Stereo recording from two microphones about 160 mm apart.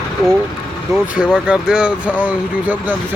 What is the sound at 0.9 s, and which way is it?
Speech, 5° right (ahead or behind).